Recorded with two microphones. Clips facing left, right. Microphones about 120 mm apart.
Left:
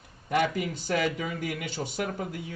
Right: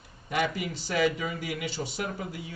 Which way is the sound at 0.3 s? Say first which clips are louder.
Left 3 dB; 50° left (ahead or behind).